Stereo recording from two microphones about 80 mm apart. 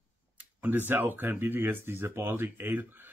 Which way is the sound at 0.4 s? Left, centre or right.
Right.